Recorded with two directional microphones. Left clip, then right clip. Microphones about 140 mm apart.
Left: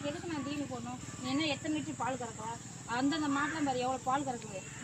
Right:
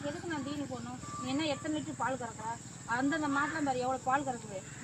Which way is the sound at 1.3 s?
10° left (ahead or behind).